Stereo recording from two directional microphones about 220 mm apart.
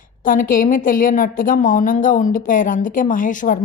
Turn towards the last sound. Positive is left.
turn(degrees=35)  # may be behind; listen again after turning